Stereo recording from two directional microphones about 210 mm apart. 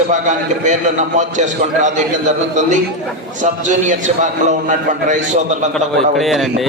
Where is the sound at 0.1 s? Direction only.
35° right (ahead or behind).